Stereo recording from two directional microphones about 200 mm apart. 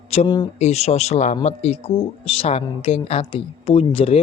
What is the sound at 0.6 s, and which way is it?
A woman's voice, 35° left (ahead or behind).